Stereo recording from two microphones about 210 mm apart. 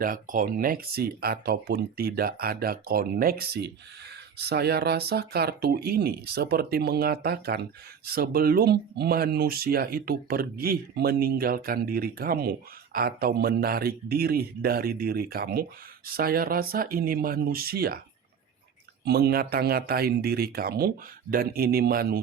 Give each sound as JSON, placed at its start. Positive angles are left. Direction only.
{"t": 0.0, "sound": "speech", "side_deg": -40}
{"t": 19.0, "sound": "speech", "side_deg": -50}